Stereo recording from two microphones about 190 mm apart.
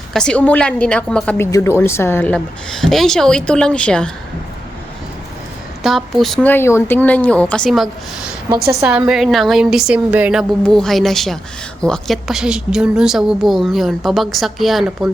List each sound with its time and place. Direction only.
0.1 s a woman's voice: 5° left (ahead or behind)
5.8 s speech: centre (ahead or behind)
8.5 s a woman's voice: 55° right (ahead or behind)
8.8 s a woman's voice: 5° right (ahead or behind)